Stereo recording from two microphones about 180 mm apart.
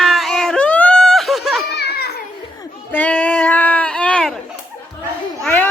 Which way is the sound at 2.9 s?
10° left (ahead or behind).